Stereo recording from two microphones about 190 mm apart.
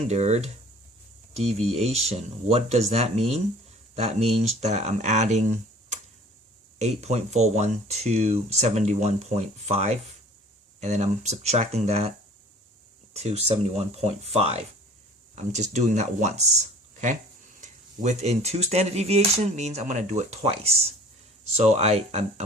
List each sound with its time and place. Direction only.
0.1 s speech: 35° right (ahead or behind)
13.1 s speech: 35° right (ahead or behind)